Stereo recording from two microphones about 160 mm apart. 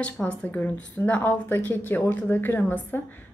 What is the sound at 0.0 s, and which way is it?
A woman's voice, 10° left (ahead or behind).